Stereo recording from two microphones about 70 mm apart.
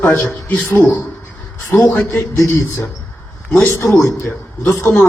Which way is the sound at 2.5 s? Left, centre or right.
Left.